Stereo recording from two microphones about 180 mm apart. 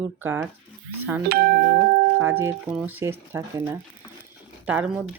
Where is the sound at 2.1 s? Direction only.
15° right (ahead or behind).